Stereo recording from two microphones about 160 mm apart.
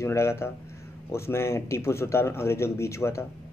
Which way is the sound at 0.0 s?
15° left (ahead or behind).